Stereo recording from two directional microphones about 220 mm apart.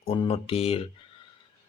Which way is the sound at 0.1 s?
25° left (ahead or behind).